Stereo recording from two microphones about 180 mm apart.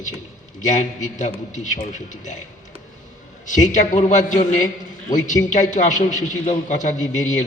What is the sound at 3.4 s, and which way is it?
A man's voice, 45° left (ahead or behind).